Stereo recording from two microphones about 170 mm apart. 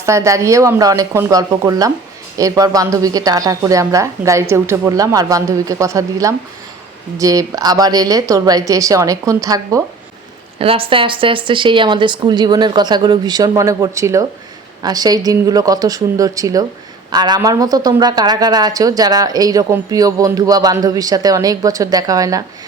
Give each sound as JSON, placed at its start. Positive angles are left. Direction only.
{"t": 0.0, "sound": "a woman's voice", "side_deg": -15}
{"t": 10.6, "sound": "a woman's voice", "side_deg": -35}